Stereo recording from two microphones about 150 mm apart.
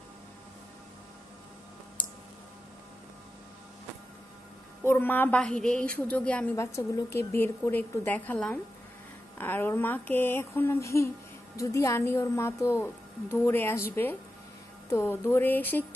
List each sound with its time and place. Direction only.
4.8 s a woman's voice: 15° left (ahead or behind)
6.5 s a woman's voice: 20° left (ahead or behind)
14.9 s a woman's voice: 20° left (ahead or behind)